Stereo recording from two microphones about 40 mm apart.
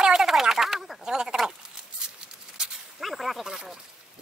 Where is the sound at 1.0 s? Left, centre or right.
Centre.